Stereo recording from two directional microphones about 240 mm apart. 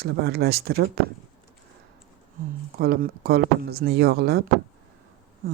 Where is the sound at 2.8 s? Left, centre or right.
Right.